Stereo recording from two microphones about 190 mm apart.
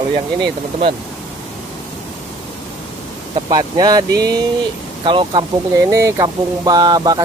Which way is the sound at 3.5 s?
20° right (ahead or behind).